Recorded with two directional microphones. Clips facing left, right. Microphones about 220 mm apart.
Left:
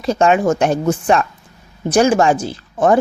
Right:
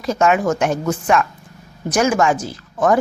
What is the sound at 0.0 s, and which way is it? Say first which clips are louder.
A woman's voice: left 3 dB; 30° left (ahead or behind).